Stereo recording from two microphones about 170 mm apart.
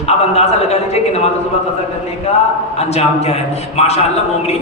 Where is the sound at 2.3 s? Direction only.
40° left (ahead or behind).